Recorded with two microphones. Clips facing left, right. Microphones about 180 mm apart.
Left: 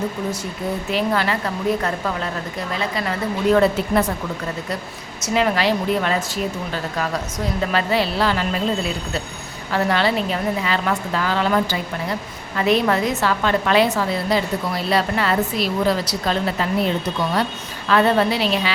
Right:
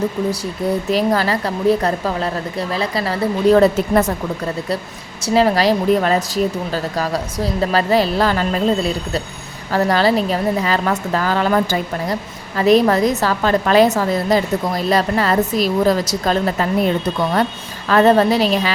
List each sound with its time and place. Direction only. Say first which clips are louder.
0.9 s a woman's voice: right 3 dB; 40° right (ahead or behind)
5.2 s a woman's voice: right 5 dB; 35° right (ahead or behind)
17.8 s a woman's voice: right 4 dB; 40° right (ahead or behind)